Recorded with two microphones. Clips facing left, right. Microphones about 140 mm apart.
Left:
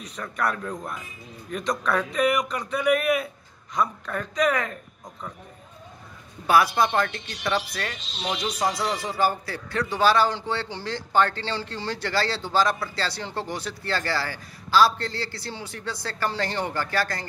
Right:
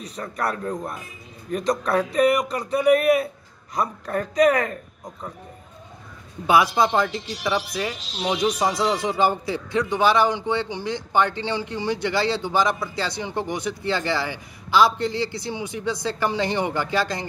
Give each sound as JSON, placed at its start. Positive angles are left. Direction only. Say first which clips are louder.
{"t": 0.0, "sound": "speech", "louder": "right 1 dB", "side_deg": -30}
{"t": 6.4, "sound": "speech", "louder": "right 2 dB", "side_deg": -15}